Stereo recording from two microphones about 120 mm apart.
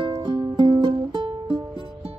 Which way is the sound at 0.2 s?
40° right (ahead or behind).